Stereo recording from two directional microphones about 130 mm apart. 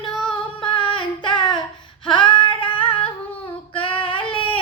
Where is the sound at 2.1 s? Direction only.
40° left (ahead or behind).